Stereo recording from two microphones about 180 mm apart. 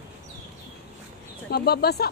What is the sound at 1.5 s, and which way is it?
Speech, 60° left (ahead or behind).